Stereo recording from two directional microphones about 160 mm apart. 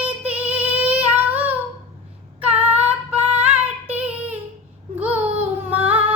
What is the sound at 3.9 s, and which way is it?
Child singing, 10° right (ahead or behind).